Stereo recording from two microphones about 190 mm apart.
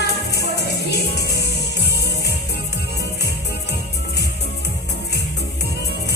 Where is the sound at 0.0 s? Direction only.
60° left (ahead or behind).